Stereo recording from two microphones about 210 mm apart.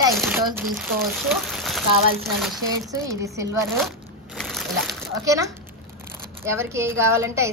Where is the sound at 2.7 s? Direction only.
15° right (ahead or behind).